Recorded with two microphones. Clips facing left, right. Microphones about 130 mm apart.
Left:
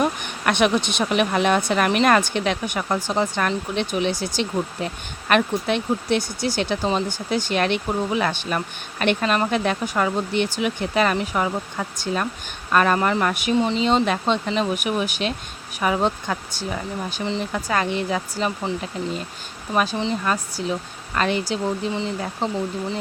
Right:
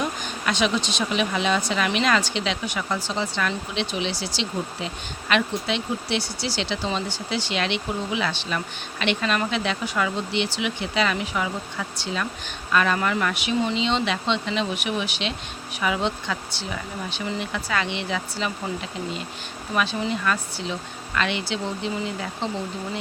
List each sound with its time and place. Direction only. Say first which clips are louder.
0.0 s speech: left 5 dB; 60° left (ahead or behind); by 18.5 s 40° left (ahead or behind)
19.7 s speech: left 3 dB; 40° left (ahead or behind)